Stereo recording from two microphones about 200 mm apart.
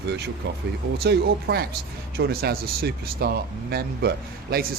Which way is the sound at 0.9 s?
50° right (ahead or behind).